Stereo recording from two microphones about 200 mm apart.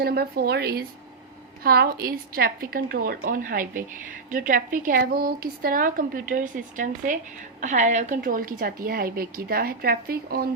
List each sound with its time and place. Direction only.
0.0 s speech: 50° right (ahead or behind)